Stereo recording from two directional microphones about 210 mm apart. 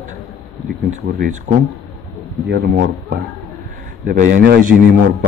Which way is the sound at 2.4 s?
55° right (ahead or behind).